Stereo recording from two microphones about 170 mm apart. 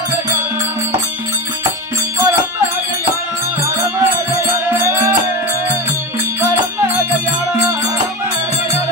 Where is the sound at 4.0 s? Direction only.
15° right (ahead or behind).